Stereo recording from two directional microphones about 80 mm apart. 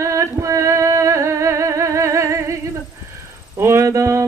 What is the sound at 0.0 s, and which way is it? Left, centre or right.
Music, right.